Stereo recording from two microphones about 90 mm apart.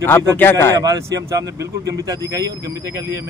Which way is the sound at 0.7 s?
40° right (ahead or behind).